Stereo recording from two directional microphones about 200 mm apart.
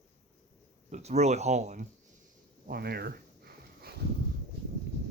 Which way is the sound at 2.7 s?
50° right (ahead or behind).